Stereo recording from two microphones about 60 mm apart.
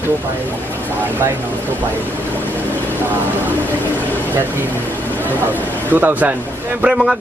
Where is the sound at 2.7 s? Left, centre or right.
Right.